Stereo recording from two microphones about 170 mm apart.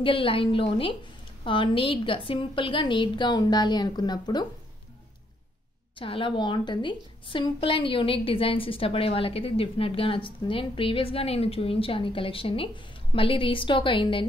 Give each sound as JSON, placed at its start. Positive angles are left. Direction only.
{"t": 0.0, "sound": "a woman's voice", "side_deg": 30}
{"t": 5.9, "sound": "a woman's voice", "side_deg": 30}